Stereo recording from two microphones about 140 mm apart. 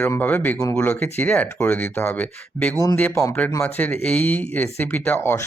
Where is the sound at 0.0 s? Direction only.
15° left (ahead or behind).